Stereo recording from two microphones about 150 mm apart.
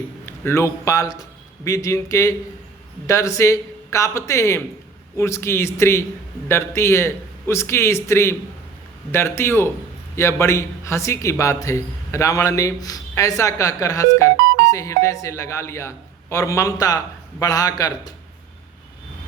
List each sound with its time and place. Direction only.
0.4 s a man's voice: 15° left (ahead or behind)